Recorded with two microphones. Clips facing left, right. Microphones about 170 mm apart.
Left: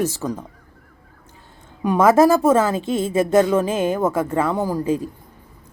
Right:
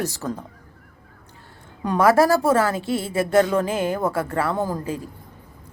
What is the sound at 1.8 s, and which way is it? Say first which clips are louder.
A woman's voice: left 3 dB; 20° left (ahead or behind).